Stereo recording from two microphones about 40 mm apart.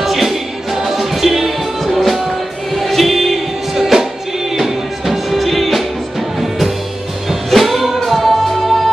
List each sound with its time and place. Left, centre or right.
0.0 s music: centre